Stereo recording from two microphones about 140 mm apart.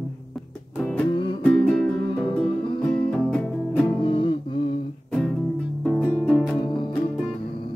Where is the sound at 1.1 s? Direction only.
35° left (ahead or behind).